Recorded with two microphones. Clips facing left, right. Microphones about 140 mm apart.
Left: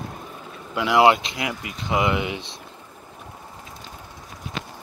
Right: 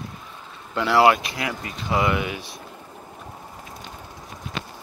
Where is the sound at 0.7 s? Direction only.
15° left (ahead or behind).